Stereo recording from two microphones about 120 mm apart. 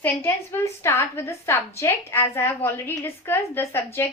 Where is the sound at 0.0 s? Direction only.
20° left (ahead or behind).